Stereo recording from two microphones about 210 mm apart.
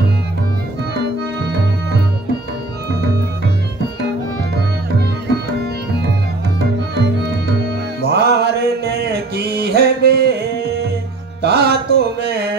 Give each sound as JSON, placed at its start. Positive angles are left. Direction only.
{"t": 7.0, "sound": "music", "side_deg": -50}